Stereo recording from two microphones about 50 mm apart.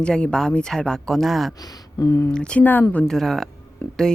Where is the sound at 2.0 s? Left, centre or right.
Left.